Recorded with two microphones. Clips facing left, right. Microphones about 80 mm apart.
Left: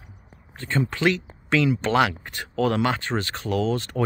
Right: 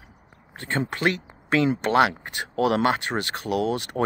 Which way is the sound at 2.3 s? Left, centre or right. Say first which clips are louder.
Right 1 dB; right.